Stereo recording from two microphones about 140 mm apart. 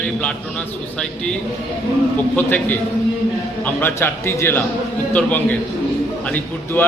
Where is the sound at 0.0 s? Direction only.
10° left (ahead or behind).